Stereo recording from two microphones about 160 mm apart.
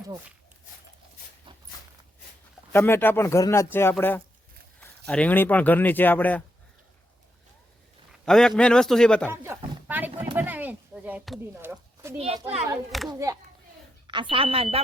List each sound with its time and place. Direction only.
1.5 s a sound: 30° right (ahead or behind)
2.7 s speech: 15° left (ahead or behind)
8.2 s a man's voice: 5° left (ahead or behind)
9.3 s speech: 15° right (ahead or behind)
9.8 s a sound: 10° right (ahead or behind)
12.2 s speech: 40° right (ahead or behind)
13.1 s a child's voice: 20° right (ahead or behind)
14.1 s speech: 30° right (ahead or behind)